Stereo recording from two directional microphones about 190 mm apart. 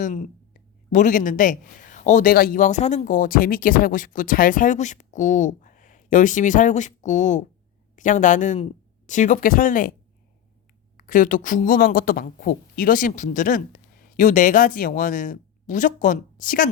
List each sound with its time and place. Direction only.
0.0 s a man's voice: 40° left (ahead or behind)
10.9 s a man's voice: 45° left (ahead or behind)